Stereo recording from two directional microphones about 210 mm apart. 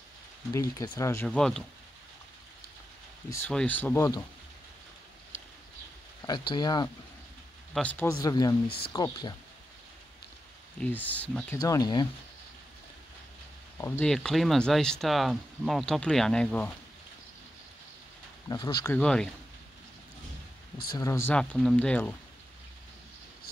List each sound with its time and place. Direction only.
0.5 s speech: 15° left (ahead or behind)
3.3 s speech: 10° left (ahead or behind)
6.2 s speech: 20° left (ahead or behind)
7.7 s speech: 5° left (ahead or behind)
8.6 s speech: 50° left (ahead or behind)
8.9 s speech: 20° left (ahead or behind)
10.8 s speech: 5° left (ahead or behind)
11.6 s speech: 20° left (ahead or behind)
13.7 s speech: 10° left (ahead or behind)
18.5 s speech: 20° left (ahead or behind); by 19.3 s 5° left (ahead or behind)
20.9 s speech: 15° left (ahead or behind)